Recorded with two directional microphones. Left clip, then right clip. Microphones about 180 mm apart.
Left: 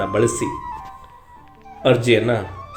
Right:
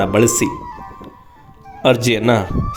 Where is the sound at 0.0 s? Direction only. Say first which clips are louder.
Right 4 dB; 50° right (ahead or behind).